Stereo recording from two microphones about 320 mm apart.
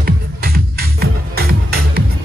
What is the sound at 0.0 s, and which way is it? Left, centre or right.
Music, right.